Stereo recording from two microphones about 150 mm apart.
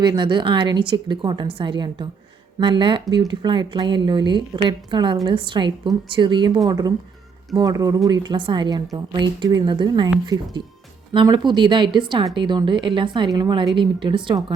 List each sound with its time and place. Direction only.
0.0 s a woman's voice: 30° right (ahead or behind)